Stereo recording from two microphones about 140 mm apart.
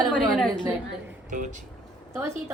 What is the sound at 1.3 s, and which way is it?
Speech, 65° right (ahead or behind).